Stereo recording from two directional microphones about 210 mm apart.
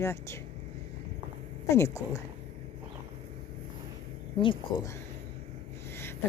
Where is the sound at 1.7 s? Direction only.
15° left (ahead or behind).